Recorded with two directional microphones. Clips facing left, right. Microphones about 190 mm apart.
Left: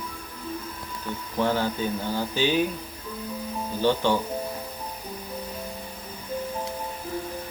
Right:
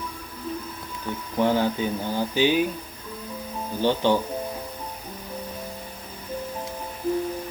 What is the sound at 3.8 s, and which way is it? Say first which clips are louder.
Speech: right 1 dB; 15° right (ahead or behind).